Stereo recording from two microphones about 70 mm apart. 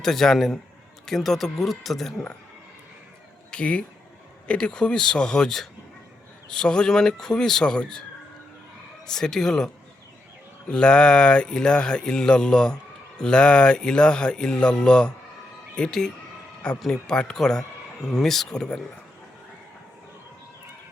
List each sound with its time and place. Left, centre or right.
0.0 s speech: centre
3.5 s speech: centre
9.0 s speech: centre
10.7 s speech: centre